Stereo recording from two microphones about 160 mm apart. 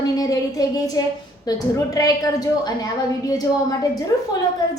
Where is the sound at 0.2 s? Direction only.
25° left (ahead or behind).